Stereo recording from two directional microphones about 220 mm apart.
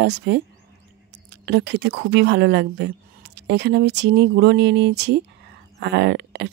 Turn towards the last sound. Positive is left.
turn(degrees=-50)  # may be behind; listen again after turning